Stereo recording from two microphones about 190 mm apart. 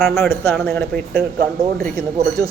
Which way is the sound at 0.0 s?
Centre (ahead or behind).